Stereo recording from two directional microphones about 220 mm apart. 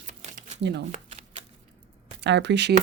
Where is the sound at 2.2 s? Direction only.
55° right (ahead or behind).